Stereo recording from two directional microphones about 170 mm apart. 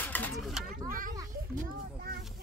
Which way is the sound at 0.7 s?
55° right (ahead or behind).